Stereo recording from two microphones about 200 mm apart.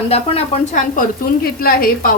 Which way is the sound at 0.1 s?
35° left (ahead or behind).